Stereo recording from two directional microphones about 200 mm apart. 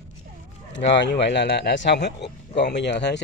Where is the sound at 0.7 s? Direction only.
60° left (ahead or behind).